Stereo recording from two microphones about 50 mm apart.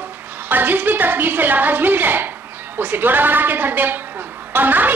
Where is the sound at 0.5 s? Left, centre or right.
Right.